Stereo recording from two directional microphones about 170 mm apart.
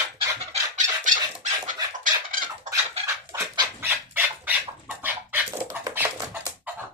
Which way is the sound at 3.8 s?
10° right (ahead or behind).